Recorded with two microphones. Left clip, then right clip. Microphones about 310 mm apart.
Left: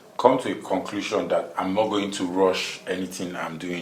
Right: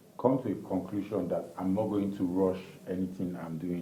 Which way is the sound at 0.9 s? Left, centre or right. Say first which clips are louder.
Left 9 dB; centre.